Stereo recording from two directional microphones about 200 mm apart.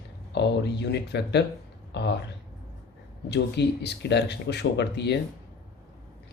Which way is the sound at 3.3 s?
60° left (ahead or behind).